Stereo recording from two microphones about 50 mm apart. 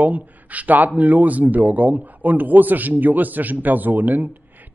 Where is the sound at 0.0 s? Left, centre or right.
Right.